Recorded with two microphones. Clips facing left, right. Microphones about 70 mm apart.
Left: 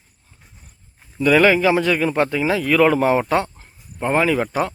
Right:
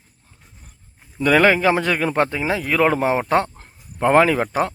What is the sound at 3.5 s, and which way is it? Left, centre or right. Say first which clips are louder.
Speech: right 2 dB; right.